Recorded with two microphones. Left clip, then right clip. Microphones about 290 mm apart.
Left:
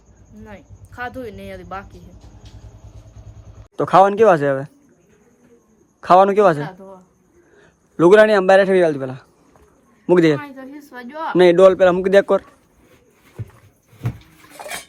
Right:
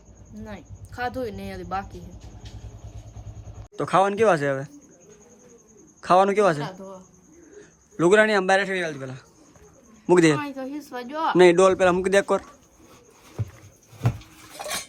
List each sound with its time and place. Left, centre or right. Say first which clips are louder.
0.4 s speech: left 1 dB; centre
3.8 s speech: left 8 dB; centre
6.0 s a man's voice: left 6 dB; centre
13.4 s a sound: right 1 dB; centre